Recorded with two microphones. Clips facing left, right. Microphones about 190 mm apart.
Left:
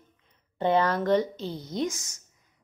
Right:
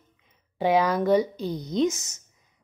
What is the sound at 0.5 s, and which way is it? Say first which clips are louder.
A woman's voice: right 2 dB; 10° right (ahead or behind).